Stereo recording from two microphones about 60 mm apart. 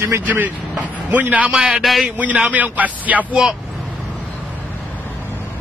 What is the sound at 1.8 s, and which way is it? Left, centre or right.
Speech, centre.